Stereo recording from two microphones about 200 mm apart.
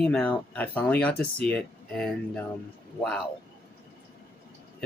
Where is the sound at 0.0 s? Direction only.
5° left (ahead or behind).